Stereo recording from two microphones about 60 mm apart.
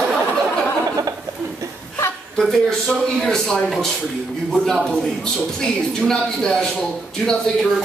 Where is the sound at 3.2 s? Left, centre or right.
Centre.